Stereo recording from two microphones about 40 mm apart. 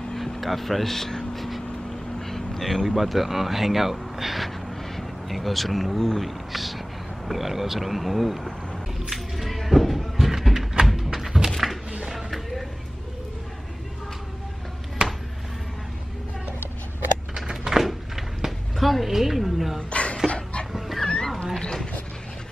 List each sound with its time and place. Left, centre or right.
0.1 s vehicle: centre
0.4 s speech: centre
9.0 s music: centre
10.9 s thump: centre
11.5 s a sound: centre
17.5 s a sound: centre
19.9 s a sound: left
20.2 s dog: left
20.7 s dog: centre
21.0 s dog: centre